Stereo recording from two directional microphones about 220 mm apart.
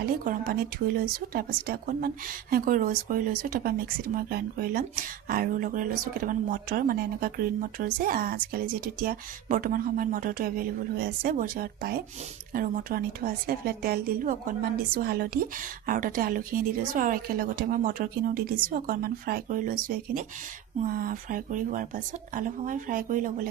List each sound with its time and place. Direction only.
0.0 s speech: 40° right (ahead or behind)